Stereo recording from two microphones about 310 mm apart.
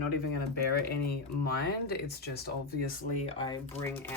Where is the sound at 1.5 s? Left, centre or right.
Left.